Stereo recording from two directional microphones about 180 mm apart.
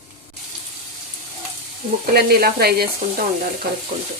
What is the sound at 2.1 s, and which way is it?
Stir, 60° right (ahead or behind).